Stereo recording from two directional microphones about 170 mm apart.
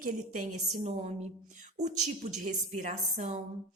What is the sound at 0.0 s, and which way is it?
A woman's voice, 50° right (ahead or behind).